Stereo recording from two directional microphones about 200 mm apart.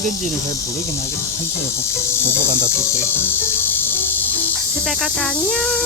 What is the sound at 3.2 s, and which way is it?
Cricket, 10° left (ahead or behind).